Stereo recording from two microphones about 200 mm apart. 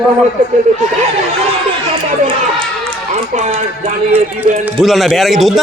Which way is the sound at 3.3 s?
35° right (ahead or behind).